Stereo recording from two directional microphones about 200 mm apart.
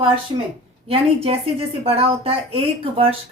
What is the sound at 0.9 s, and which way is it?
A woman's voice, 30° right (ahead or behind).